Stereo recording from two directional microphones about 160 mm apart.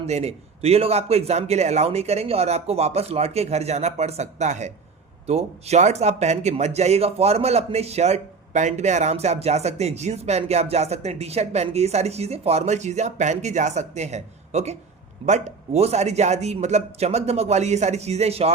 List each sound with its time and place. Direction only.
0.1 s a man's voice: 40° right (ahead or behind)